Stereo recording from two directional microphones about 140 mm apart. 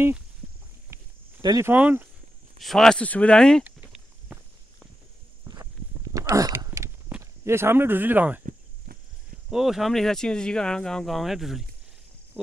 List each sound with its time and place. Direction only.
1.4 s speech: 25° right (ahead or behind)
1.7 s speech: 15° right (ahead or behind)
2.6 s speech: 5° left (ahead or behind)
3.6 s walk: 10° right (ahead or behind)
5.4 s walk: 25° right (ahead or behind)
6.1 s a sound: 25° right (ahead or behind)
7.1 s speech: 15° right (ahead or behind)
9.5 s speech: 5° right (ahead or behind)